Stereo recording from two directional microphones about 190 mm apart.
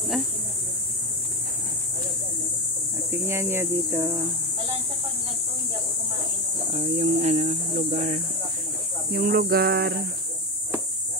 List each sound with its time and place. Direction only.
3.1 s speech: 15° right (ahead or behind)
6.7 s speech: 35° right (ahead or behind)
9.1 s a sound: 50° right (ahead or behind)